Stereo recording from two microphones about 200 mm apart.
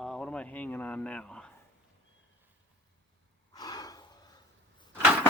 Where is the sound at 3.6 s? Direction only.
20° left (ahead or behind).